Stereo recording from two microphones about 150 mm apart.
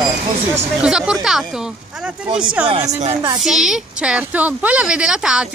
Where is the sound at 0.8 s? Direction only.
5° right (ahead or behind).